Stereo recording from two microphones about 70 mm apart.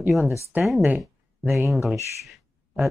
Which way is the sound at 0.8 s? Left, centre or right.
Right.